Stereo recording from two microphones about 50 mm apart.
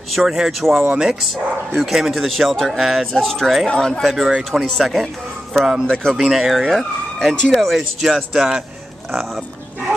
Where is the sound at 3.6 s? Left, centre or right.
Centre.